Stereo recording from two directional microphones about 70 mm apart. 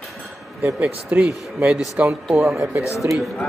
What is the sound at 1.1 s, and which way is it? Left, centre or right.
Speech, right.